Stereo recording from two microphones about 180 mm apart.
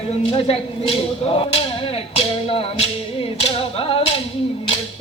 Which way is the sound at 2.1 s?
30° left (ahead or behind).